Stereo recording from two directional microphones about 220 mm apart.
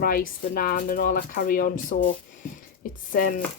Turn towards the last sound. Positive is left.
turn(degrees=40)  # may be behind; listen again after turning